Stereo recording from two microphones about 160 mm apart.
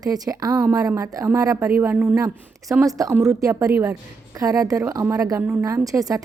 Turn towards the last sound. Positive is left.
turn(degrees=-20)  # may be behind; listen again after turning